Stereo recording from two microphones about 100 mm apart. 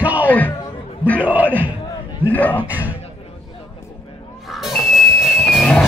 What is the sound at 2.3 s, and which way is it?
Speech, 15° left (ahead or behind).